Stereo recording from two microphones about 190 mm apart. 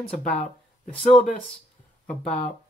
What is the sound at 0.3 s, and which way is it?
Speech, 5° left (ahead or behind).